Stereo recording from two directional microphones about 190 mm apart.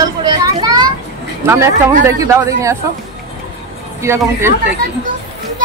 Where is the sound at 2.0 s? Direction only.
15° right (ahead or behind).